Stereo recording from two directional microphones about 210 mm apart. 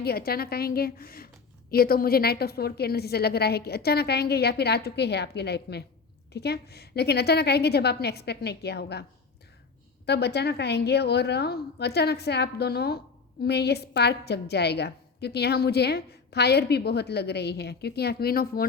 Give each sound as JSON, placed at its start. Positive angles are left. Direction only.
{"t": 0.0, "sound": "a woman's voice", "side_deg": 45}
{"t": 10.1, "sound": "a woman's voice", "side_deg": 50}